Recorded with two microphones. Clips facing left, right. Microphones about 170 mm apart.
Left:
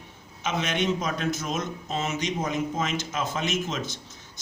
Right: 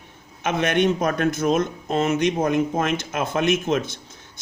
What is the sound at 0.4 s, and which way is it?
Speech, 55° right (ahead or behind).